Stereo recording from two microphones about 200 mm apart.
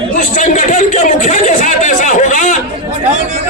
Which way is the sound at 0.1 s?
40° left (ahead or behind).